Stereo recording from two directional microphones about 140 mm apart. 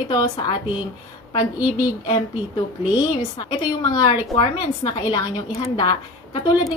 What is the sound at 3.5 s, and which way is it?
A woman's voice, 30° left (ahead or behind).